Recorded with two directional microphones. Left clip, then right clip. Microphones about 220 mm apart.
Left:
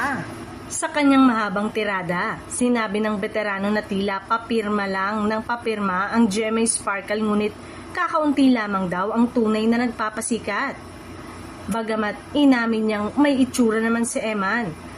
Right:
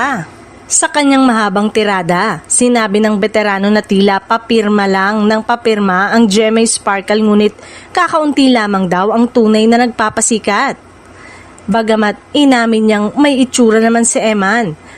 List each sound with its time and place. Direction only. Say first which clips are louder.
0.8 s a woman's voice: right 8 dB; 45° right (ahead or behind)